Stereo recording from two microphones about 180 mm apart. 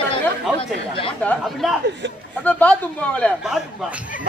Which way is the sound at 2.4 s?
5° left (ahead or behind).